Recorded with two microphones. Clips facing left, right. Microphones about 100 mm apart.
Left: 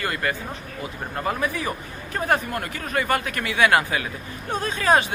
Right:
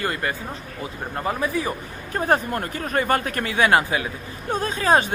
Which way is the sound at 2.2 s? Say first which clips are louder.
Right 2 dB; 40° right (ahead or behind).